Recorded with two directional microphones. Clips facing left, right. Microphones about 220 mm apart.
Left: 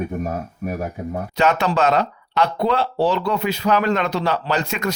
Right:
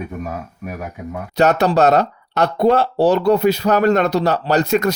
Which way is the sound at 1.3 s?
40° right (ahead or behind).